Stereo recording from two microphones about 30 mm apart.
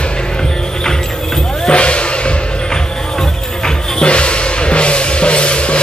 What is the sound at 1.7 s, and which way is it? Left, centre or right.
Music, left.